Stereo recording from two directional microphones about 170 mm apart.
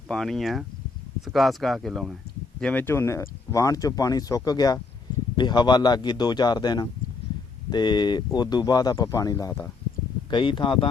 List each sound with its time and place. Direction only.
0.1 s speech: centre (ahead or behind); by 10.8 s 30° left (ahead or behind)